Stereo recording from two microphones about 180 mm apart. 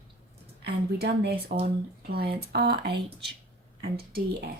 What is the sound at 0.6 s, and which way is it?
Speech, 65° right (ahead or behind).